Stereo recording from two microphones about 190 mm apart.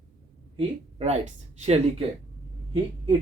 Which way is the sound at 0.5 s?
30° right (ahead or behind).